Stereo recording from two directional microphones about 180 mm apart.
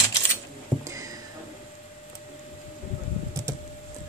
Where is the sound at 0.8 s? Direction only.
15° right (ahead or behind).